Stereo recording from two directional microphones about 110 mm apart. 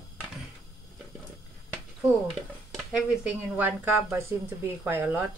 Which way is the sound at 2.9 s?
10° right (ahead or behind).